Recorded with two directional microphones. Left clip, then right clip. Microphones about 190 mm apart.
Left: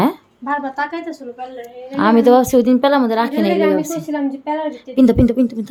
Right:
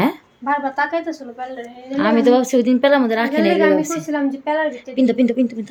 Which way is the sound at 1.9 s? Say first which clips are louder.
Left 3 dB; 25° left (ahead or behind).